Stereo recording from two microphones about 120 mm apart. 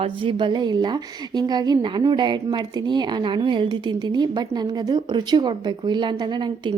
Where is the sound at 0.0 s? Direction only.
45° right (ahead or behind).